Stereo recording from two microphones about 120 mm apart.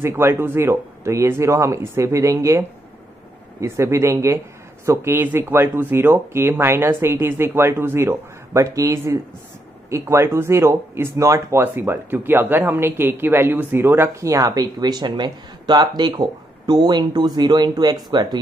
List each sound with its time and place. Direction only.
0.0 s speech: 20° right (ahead or behind)
3.6 s speech: 25° right (ahead or behind)